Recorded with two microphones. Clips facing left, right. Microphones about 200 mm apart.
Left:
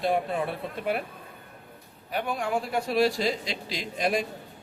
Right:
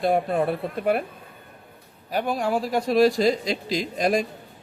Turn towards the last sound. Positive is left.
turn(degrees=-40)  # may be behind; listen again after turning